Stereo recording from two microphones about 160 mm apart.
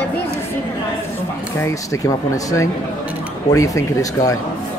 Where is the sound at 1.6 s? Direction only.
20° left (ahead or behind).